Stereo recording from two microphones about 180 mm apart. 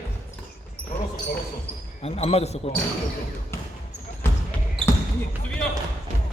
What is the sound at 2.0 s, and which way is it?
Speech, 35° left (ahead or behind).